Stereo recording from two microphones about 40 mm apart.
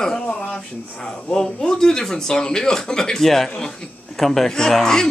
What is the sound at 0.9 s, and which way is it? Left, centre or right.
Speech, centre.